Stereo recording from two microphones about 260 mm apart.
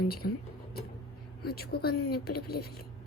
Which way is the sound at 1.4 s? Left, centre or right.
Left.